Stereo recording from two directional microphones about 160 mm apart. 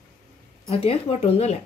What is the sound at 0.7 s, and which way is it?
Speech, 40° left (ahead or behind).